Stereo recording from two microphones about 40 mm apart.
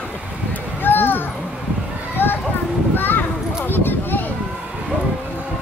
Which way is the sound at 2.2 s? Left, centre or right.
Left.